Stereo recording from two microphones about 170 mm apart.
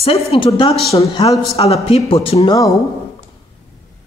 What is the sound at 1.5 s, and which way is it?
Speech, 35° left (ahead or behind).